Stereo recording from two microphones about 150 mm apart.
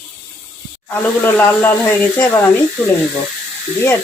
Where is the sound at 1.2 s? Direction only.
15° left (ahead or behind).